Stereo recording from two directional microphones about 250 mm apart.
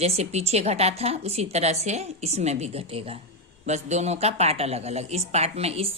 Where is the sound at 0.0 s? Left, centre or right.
Right.